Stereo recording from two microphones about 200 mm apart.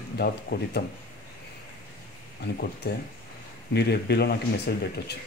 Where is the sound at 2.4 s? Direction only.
50° left (ahead or behind).